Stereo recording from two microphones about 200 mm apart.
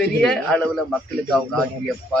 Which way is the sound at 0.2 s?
5° left (ahead or behind).